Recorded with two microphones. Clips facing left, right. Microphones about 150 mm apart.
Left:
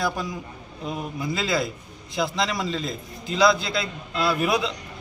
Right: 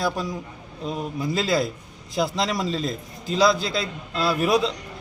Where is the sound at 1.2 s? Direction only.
35° right (ahead or behind).